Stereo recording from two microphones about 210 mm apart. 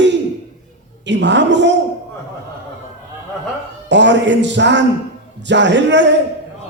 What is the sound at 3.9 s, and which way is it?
A man's voice, 55° right (ahead or behind).